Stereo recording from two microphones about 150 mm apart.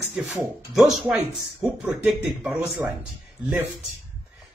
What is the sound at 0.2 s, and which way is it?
Speech, 5° right (ahead or behind).